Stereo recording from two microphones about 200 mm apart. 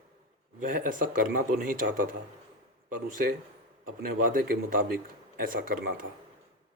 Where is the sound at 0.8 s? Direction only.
40° right (ahead or behind).